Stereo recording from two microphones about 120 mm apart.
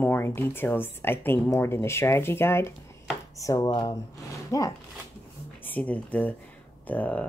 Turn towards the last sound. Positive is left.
turn(degrees=10)  # may be behind; listen again after turning